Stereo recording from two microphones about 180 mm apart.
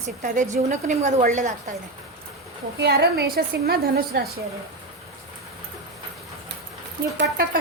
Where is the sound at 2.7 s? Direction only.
65° right (ahead or behind).